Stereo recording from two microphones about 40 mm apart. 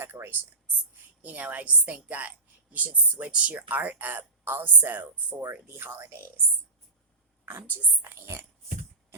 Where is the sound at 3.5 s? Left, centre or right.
Right.